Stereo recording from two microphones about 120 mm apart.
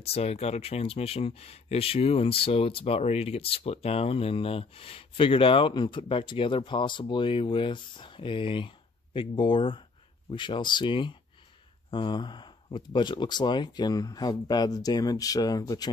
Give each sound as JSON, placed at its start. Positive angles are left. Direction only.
{"t": 0.0, "sound": "speech", "side_deg": 55}